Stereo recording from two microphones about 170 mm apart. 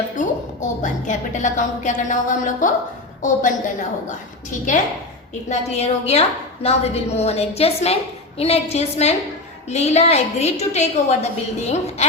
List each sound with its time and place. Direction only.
0.2 s a woman's voice: 45° left (ahead or behind)
5.5 s a woman's voice: 40° left (ahead or behind)